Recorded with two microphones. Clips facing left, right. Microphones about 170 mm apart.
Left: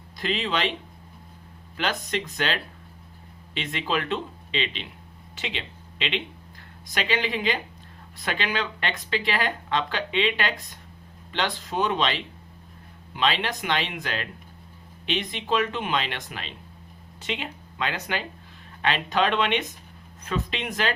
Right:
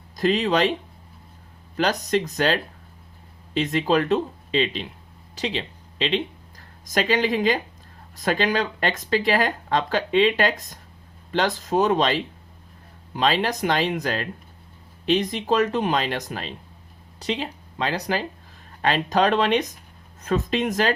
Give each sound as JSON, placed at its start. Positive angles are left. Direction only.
{"t": 0.2, "sound": "speech", "side_deg": -40}